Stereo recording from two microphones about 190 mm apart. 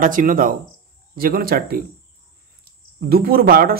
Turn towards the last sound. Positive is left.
turn(degrees=-50)  # may be behind; listen again after turning